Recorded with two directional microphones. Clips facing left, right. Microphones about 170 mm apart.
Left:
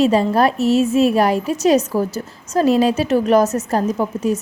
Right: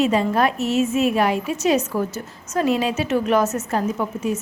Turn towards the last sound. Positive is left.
turn(degrees=35)  # may be behind; listen again after turning